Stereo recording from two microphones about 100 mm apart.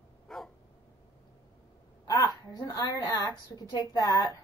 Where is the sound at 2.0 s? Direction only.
40° left (ahead or behind).